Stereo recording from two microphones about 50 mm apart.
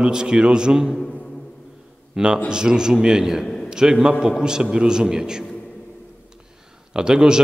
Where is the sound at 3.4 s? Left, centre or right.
Centre.